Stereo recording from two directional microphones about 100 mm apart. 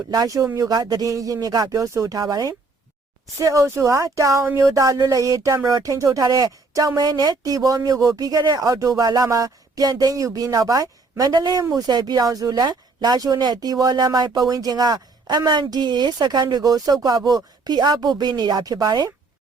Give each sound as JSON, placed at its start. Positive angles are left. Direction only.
{"t": 0.1, "sound": "a woman's voice", "side_deg": -35}